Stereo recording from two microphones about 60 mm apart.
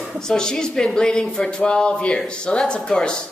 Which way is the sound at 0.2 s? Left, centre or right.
Centre.